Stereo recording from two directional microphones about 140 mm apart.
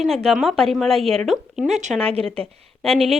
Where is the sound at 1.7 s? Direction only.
60° right (ahead or behind).